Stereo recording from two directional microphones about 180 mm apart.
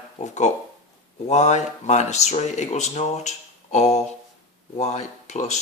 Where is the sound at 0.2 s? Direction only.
40° left (ahead or behind).